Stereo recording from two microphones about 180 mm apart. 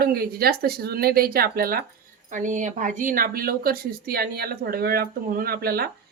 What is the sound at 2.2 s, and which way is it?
Speech, 45° right (ahead or behind).